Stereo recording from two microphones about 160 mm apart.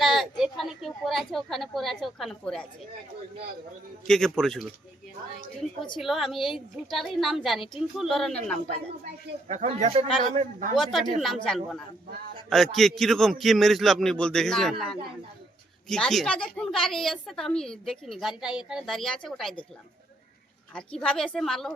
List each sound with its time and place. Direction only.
0.0 s a woman's voice: centre (ahead or behind)
4.0 s a woman's voice: 5° left (ahead or behind)
6.0 s a woman's voice: centre (ahead or behind)
9.5 s speech: 45° right (ahead or behind)
10.8 s a woman's voice: centre (ahead or behind)
20.7 s a woman's voice: 5° left (ahead or behind)